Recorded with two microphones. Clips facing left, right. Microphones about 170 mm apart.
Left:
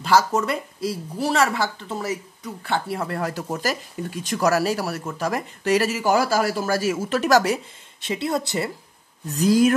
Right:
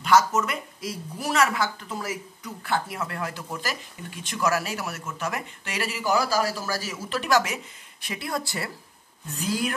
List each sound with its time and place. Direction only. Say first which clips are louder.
0.0 s speech: left 1 dB; 30° left (ahead or behind)
9.3 s speech: left 11 dB; 40° left (ahead or behind)